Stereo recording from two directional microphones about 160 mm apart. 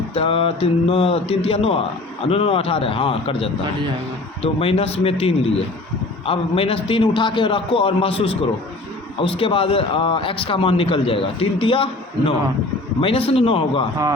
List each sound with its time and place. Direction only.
0.1 s speech: 35° left (ahead or behind)